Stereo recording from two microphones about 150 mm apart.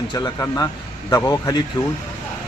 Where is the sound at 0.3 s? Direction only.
20° left (ahead or behind).